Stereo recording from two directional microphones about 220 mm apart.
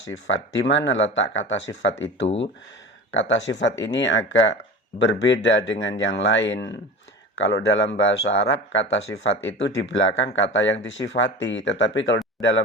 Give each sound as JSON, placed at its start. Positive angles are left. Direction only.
{"t": 0.3, "sound": "speech", "side_deg": 55}